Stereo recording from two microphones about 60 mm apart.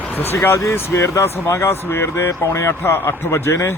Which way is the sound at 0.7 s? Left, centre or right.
Left.